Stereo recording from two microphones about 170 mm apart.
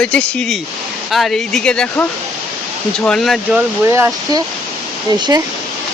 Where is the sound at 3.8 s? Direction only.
15° right (ahead or behind).